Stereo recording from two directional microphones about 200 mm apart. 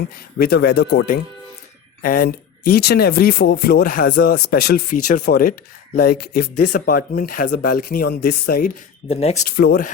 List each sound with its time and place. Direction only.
0.3 s speech: 50° left (ahead or behind)
9.0 s speech: 30° left (ahead or behind)
9.6 s speech: 50° left (ahead or behind)